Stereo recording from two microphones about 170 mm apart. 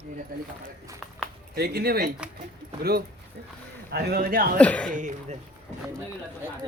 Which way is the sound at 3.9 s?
70° right (ahead or behind).